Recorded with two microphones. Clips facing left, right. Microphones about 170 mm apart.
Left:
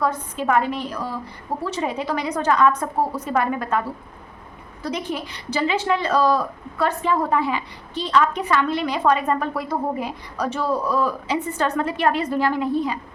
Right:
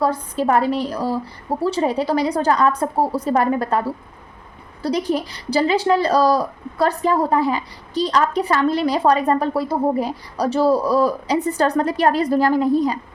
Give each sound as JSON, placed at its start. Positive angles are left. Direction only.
{"t": 0.0, "sound": "a woman's voice", "side_deg": -35}